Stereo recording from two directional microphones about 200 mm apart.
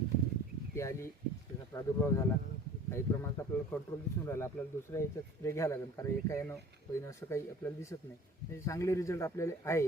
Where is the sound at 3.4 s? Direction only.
15° left (ahead or behind).